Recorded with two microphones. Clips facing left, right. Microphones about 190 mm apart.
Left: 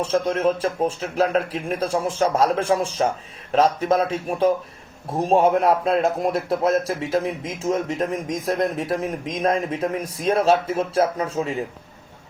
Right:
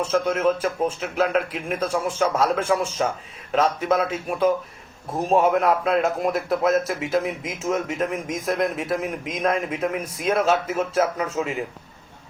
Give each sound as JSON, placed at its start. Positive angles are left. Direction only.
{"t": 0.0, "sound": "a man's voice", "side_deg": 35}